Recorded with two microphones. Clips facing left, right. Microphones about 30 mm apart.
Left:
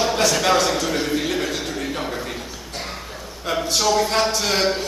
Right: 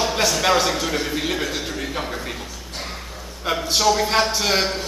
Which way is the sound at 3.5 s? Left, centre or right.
Centre.